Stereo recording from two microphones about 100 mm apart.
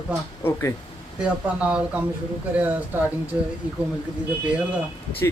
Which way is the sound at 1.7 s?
15° right (ahead or behind).